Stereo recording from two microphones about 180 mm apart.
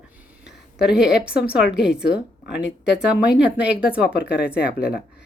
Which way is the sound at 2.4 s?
75° left (ahead or behind).